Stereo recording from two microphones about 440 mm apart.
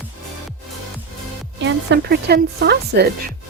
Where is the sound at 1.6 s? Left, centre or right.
Right.